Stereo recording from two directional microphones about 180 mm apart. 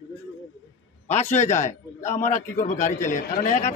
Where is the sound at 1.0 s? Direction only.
40° left (ahead or behind).